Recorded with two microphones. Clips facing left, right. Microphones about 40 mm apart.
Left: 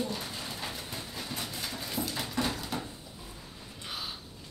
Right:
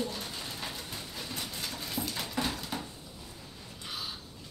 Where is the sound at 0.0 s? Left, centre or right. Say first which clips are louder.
Left 1 dB; centre.